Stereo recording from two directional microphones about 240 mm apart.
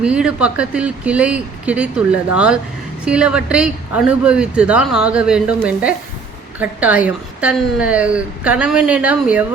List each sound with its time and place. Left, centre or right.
0.0 s a woman's voice: centre